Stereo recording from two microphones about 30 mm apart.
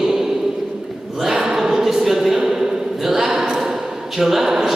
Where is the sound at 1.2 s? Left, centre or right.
Centre.